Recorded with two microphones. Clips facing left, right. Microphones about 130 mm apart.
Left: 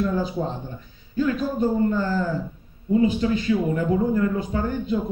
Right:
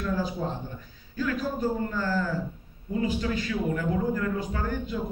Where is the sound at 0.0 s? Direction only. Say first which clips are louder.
Left 5 dB; 20° left (ahead or behind).